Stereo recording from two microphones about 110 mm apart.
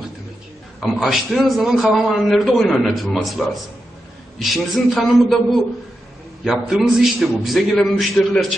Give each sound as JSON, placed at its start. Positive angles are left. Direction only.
{"t": 0.8, "sound": "a man's voice", "side_deg": 0}